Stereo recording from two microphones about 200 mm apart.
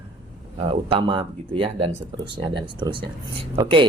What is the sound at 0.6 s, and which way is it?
Speech, 25° right (ahead or behind).